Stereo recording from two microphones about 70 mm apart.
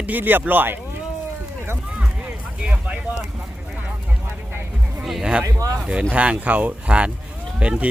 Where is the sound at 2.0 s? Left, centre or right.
Centre.